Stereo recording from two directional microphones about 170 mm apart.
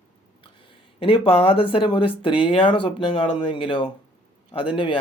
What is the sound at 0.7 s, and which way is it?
Speech, 30° left (ahead or behind).